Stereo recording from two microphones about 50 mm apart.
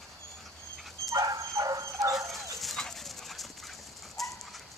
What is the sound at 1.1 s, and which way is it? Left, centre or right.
Dog, right.